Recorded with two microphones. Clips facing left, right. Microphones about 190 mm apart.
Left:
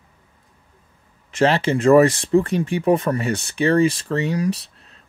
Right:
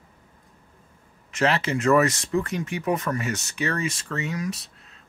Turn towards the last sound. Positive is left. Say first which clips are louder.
# left 8 dB
turn(degrees=35)  # may be behind; listen again after turning